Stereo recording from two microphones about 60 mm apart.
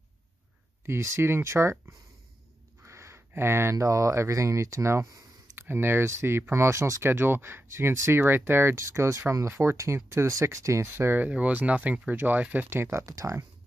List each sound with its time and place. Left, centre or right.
0.8 s speech: right
2.8 s a sound: right
3.7 s speech: right
5.6 s speech: right
7.1 s speech: right
8.7 s speech: right
11.0 s speech: right
11.2 s speech: right
12.9 s speech: right